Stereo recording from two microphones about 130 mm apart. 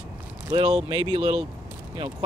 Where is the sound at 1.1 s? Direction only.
45° right (ahead or behind).